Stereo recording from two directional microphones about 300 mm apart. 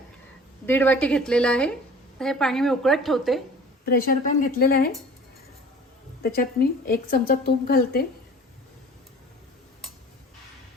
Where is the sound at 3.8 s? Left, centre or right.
Left.